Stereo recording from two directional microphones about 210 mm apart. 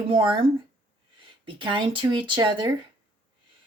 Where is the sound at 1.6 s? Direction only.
25° right (ahead or behind).